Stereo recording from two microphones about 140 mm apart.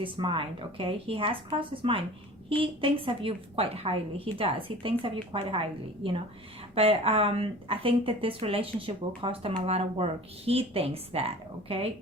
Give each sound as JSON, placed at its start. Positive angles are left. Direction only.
{"t": 0.0, "sound": "speech", "side_deg": -40}